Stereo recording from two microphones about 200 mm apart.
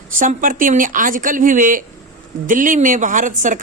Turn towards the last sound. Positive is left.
turn(degrees=-40)  # may be behind; listen again after turning